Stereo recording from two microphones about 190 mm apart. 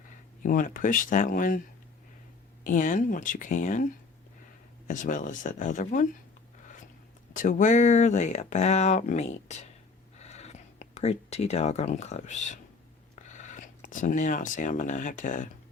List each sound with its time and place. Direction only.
0.4 s speech: 45° left (ahead or behind)
2.6 s speech: 45° left (ahead or behind)
4.9 s speech: 45° left (ahead or behind)
7.3 s speech: 45° left (ahead or behind)
10.2 s a sound: 35° left (ahead or behind)
13.1 s speech: 40° left (ahead or behind)